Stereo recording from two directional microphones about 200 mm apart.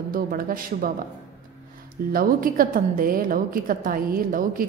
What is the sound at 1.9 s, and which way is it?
A woman's voice, 45° right (ahead or behind).